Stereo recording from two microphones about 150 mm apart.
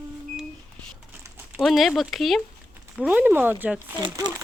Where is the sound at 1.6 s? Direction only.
Centre (ahead or behind).